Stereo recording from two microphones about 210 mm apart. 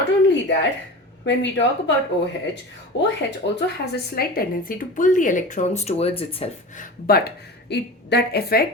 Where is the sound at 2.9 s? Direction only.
55° left (ahead or behind).